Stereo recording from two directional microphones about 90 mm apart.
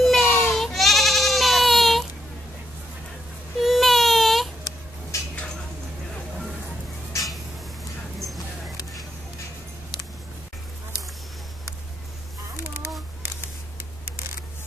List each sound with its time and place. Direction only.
0.0 s baby cry: centre (ahead or behind)
0.3 s baby cry: 20° left (ahead or behind)
0.6 s goat: centre (ahead or behind)
3.5 s baby cry: centre (ahead or behind)